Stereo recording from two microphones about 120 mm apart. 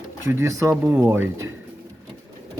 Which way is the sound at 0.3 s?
25° right (ahead or behind).